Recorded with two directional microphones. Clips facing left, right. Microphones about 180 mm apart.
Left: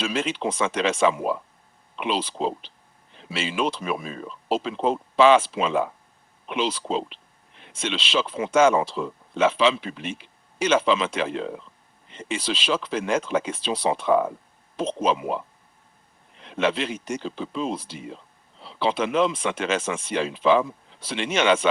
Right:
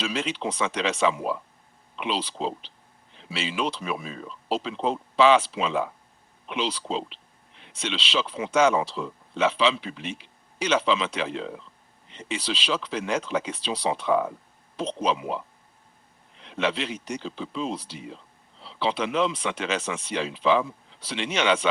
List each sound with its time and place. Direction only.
0.0 s speech: 50° left (ahead or behind)
16.4 s speech: 50° left (ahead or behind)